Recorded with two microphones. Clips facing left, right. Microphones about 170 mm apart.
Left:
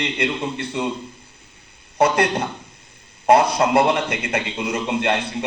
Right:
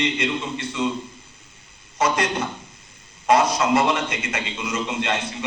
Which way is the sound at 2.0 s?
60° left (ahead or behind).